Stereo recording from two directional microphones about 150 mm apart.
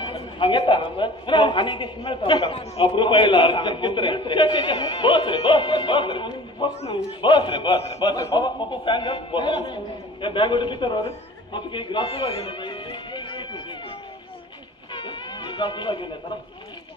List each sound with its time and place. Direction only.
0.0 s a man's voice: 35° left (ahead or behind)
11.5 s music: 30° left (ahead or behind)
15.0 s a sound: 30° left (ahead or behind)